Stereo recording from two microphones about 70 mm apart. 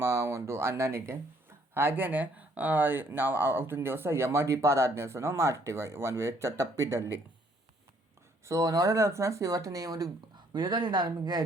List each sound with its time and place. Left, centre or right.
0.0 s speech: right
8.4 s speech: right
10.3 s speech: right